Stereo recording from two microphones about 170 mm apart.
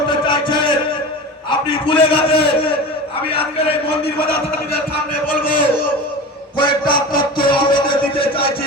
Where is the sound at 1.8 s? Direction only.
30° left (ahead or behind).